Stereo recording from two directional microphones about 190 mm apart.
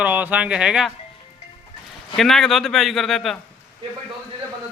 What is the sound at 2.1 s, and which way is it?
Speech, centre (ahead or behind).